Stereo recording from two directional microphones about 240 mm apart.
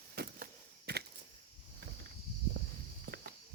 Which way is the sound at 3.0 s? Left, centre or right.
Right.